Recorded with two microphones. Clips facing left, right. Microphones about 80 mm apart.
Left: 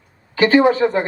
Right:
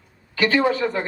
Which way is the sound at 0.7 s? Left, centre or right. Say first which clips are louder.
Left 6 dB; left.